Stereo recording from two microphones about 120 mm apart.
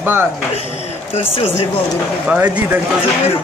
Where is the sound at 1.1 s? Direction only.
55° left (ahead or behind).